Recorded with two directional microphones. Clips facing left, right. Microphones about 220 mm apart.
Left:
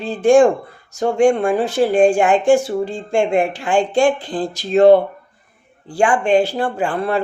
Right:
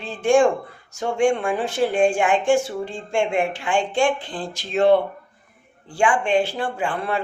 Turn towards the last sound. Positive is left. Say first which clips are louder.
# left 5 dB
turn(degrees=40)  # may be behind; listen again after turning